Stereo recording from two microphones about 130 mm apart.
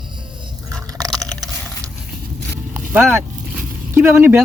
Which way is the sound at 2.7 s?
15° right (ahead or behind).